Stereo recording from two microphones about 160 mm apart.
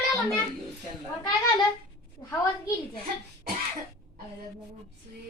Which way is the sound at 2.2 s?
20° left (ahead or behind).